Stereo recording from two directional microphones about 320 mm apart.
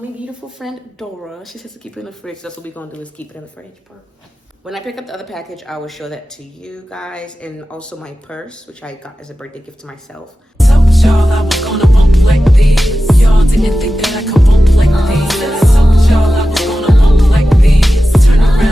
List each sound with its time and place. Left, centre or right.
0.6 s speech: centre
4.6 s speech: centre
10.6 s music: centre